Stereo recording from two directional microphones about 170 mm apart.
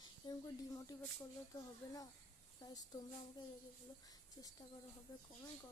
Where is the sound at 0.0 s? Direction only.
20° left (ahead or behind).